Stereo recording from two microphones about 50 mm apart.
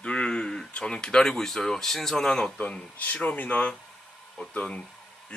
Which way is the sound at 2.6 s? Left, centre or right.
Left.